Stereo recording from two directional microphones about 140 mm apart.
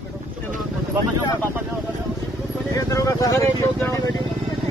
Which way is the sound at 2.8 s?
20° left (ahead or behind).